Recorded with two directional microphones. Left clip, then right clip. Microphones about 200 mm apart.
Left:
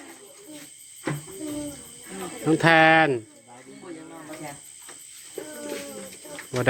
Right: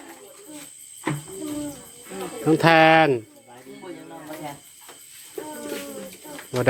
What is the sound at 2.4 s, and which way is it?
Speech, 5° right (ahead or behind).